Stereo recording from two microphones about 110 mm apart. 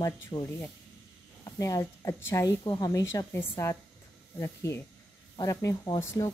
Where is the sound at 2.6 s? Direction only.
35° left (ahead or behind).